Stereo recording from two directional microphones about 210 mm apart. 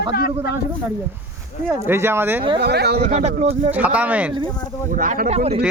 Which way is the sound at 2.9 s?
35° right (ahead or behind).